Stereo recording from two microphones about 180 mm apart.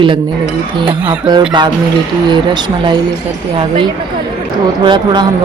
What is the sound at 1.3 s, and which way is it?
Speech, 25° right (ahead or behind).